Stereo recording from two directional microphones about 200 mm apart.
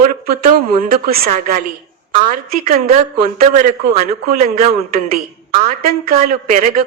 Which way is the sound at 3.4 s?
35° right (ahead or behind).